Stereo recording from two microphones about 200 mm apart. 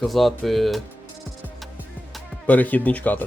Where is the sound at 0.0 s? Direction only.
Centre (ahead or behind).